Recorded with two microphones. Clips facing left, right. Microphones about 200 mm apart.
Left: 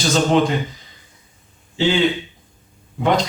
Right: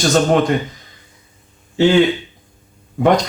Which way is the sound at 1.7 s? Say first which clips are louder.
Right 6 dB; 50° right (ahead or behind).